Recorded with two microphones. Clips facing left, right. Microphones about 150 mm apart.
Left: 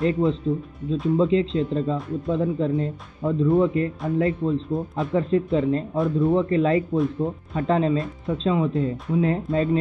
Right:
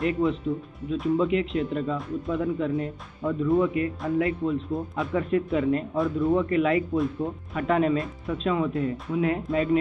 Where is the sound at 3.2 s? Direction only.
20° left (ahead or behind).